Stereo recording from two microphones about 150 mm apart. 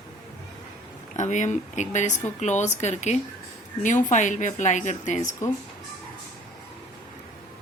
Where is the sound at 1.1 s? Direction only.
50° left (ahead or behind).